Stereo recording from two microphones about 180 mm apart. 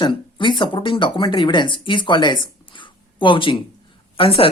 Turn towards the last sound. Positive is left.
turn(degrees=30)  # may be behind; listen again after turning